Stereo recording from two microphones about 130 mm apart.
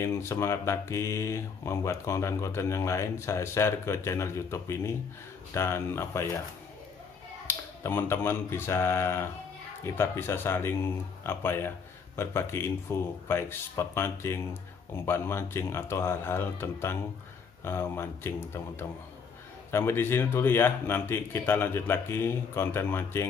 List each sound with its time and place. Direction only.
0.0 s speech: 20° left (ahead or behind)
7.4 s speech: 15° left (ahead or behind)